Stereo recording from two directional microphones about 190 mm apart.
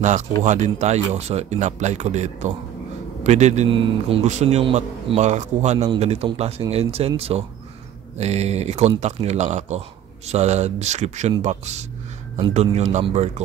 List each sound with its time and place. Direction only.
0.4 s speech: 40° right (ahead or behind)